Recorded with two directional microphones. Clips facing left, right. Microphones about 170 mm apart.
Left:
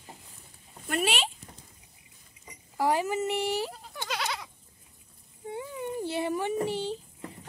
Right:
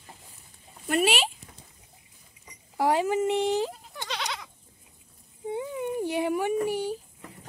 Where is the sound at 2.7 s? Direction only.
15° right (ahead or behind).